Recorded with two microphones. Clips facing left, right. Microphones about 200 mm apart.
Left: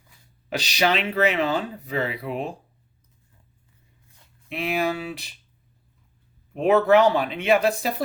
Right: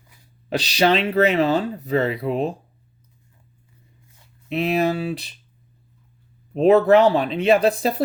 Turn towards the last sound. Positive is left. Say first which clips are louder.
# right 4 dB
turn(degrees=-35)  # may be behind; listen again after turning